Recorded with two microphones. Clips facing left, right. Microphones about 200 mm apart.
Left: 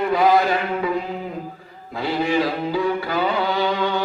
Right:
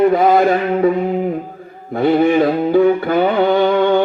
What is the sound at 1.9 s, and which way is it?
Music, 55° right (ahead or behind).